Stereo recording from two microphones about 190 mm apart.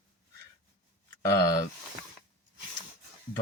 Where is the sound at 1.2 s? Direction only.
20° left (ahead or behind).